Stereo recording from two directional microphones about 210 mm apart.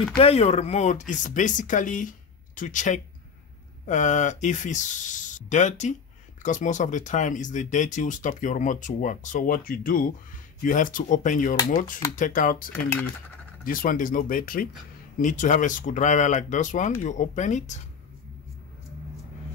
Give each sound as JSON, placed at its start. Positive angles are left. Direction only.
{"t": 0.2, "sound": "speech", "side_deg": 30}
{"t": 13.7, "sound": "speech", "side_deg": 40}